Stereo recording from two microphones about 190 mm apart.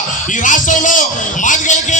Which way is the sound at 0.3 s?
40° left (ahead or behind).